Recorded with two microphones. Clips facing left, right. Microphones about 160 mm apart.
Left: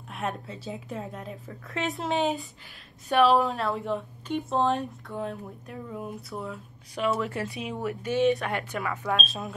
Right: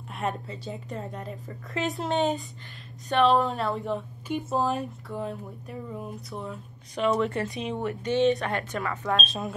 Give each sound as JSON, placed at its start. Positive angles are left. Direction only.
{"t": 0.1, "sound": "a woman's voice", "side_deg": 0}